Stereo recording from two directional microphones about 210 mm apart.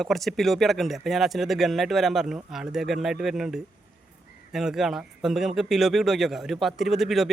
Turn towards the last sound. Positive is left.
turn(degrees=0)  # may be behind; listen again after turning